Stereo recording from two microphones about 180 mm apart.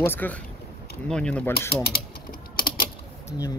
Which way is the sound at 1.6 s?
60° left (ahead or behind).